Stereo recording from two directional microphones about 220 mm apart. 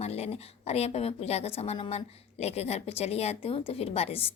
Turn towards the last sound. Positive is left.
turn(degrees=25)  # may be behind; listen again after turning